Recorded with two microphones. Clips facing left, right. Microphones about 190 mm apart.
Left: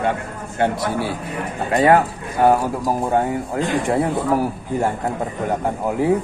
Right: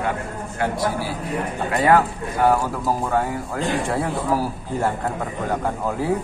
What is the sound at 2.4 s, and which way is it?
Speech, 25° left (ahead or behind).